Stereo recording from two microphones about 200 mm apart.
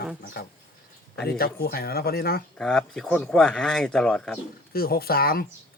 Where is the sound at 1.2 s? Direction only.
50° left (ahead or behind).